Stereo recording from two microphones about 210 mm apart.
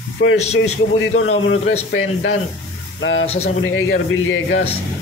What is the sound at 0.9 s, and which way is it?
Speech, 75° left (ahead or behind).